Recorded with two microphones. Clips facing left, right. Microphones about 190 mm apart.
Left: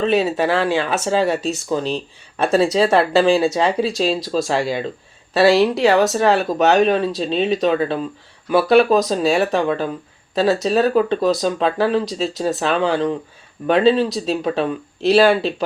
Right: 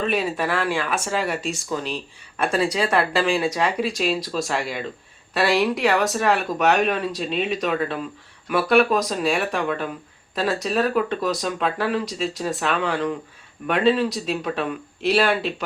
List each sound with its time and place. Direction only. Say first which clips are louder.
0.0 s speech: left 6 dB; 25° left (ahead or behind)